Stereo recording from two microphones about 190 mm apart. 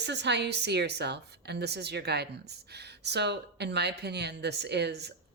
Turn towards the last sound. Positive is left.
turn(degrees=-60)  # may be behind; listen again after turning